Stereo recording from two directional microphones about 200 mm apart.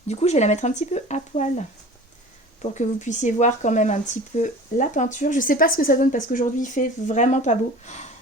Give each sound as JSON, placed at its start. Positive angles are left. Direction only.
{"t": 0.1, "sound": "speech", "side_deg": 35}